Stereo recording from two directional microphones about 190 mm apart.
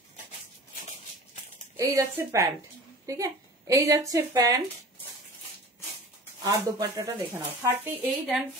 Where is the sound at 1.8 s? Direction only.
15° right (ahead or behind).